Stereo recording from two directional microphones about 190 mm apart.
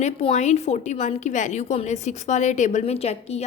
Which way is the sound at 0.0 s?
35° left (ahead or behind).